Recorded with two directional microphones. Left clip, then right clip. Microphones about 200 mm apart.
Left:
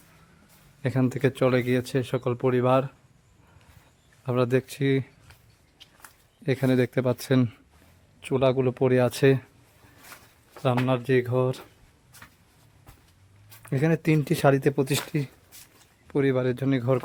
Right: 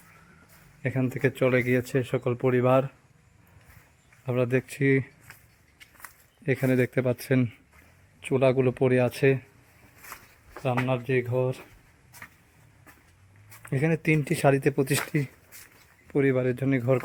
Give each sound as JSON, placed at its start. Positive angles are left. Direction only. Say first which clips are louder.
{"t": 0.8, "sound": "speech", "louder": "left 2 dB", "side_deg": 20}
{"t": 4.3, "sound": "speech", "louder": "left 2 dB", "side_deg": 15}
{"t": 6.4, "sound": "speech", "louder": "left 1 dB", "side_deg": 10}
{"t": 8.2, "sound": "speech", "louder": "even", "side_deg": 0}
{"t": 10.8, "sound": "speech", "louder": "left 3 dB", "side_deg": 20}
{"t": 13.7, "sound": "speech", "louder": "left 1 dB", "side_deg": 15}